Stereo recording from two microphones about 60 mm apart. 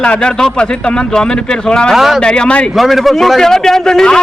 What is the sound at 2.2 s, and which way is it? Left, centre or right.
Speech, centre.